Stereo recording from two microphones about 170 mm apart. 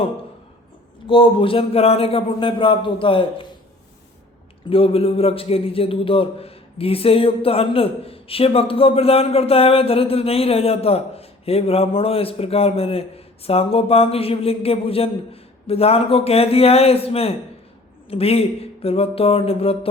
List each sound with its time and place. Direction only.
1.0 s a man's voice: 30° left (ahead or behind)
4.7 s a man's voice: 35° left (ahead or behind)